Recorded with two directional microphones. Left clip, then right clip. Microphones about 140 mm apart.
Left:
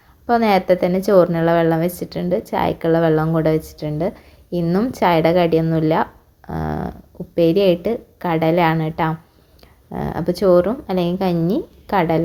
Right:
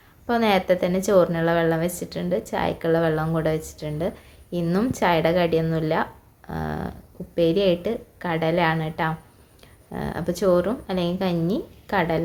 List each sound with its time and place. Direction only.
0.3 s a woman's voice: 35° left (ahead or behind)